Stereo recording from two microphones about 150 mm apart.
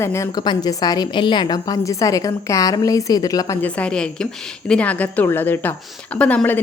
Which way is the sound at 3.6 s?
10° left (ahead or behind).